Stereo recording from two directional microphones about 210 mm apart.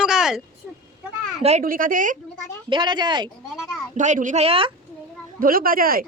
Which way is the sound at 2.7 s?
20° right (ahead or behind).